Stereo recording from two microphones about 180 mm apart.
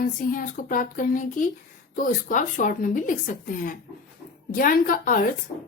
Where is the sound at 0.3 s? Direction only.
50° left (ahead or behind).